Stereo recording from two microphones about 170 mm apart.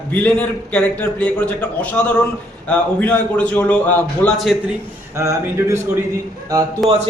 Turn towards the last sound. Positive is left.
turn(degrees=0)  # may be behind; listen again after turning